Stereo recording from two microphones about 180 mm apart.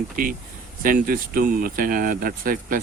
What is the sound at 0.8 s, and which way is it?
Speech, 50° right (ahead or behind).